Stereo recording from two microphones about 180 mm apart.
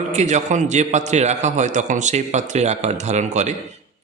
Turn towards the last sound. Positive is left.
turn(degrees=-40)  # may be behind; listen again after turning